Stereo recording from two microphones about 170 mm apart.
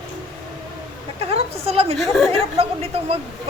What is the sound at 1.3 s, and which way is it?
A woman's voice, 35° right (ahead or behind).